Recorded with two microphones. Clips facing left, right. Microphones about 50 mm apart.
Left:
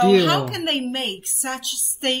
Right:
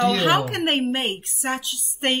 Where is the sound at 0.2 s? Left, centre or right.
Centre.